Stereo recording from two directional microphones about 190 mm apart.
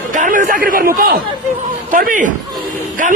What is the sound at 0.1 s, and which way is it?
A man's voice, 45° right (ahead or behind).